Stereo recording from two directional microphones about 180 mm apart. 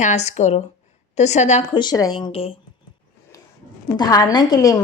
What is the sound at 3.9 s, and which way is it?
Speech, 20° left (ahead or behind).